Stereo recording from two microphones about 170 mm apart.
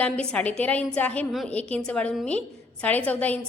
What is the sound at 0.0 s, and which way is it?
A woman's voice, 5° left (ahead or behind).